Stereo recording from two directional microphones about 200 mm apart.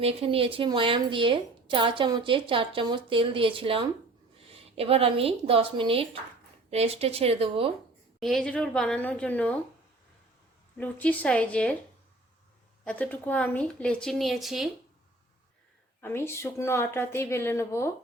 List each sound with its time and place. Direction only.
0.0 s speech: 30° right (ahead or behind)
8.2 s speech: centre (ahead or behind)
10.8 s a woman's voice: 10° left (ahead or behind)
12.8 s speech: 5° left (ahead or behind)
16.0 s a woman's voice: 10° left (ahead or behind)